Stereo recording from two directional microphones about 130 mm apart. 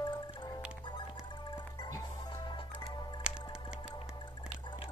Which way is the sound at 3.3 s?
5° right (ahead or behind).